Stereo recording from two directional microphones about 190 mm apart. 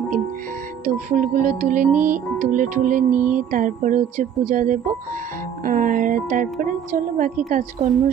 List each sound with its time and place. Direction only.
0.8 s speech: 45° right (ahead or behind)